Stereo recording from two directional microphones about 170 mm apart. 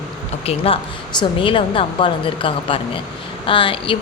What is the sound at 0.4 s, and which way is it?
A woman's voice, 35° left (ahead or behind).